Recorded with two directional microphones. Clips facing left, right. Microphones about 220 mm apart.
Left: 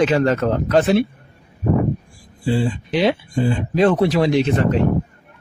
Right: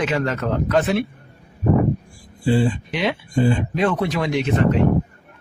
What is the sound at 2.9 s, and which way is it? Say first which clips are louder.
Speech: left 5 dB; 35° left (ahead or behind).